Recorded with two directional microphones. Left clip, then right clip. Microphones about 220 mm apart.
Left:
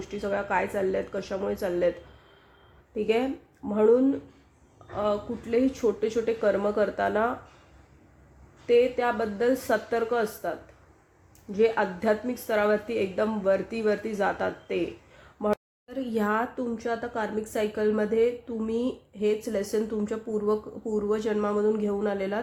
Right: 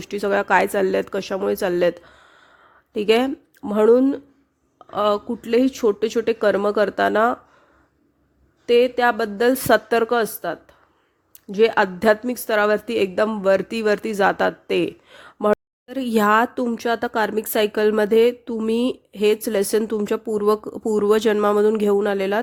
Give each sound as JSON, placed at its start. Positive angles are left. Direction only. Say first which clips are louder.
{"t": 0.0, "sound": "speech", "louder": "right 9 dB", "side_deg": -45}
{"t": 2.9, "sound": "speech", "louder": "right 8 dB", "side_deg": -50}
{"t": 8.6, "sound": "speech", "louder": "right 6 dB", "side_deg": -50}
{"t": 11.5, "sound": "speech", "louder": "right 7 dB", "side_deg": -50}